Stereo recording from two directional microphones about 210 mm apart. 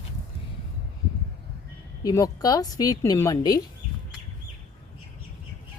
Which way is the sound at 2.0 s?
15° left (ahead or behind).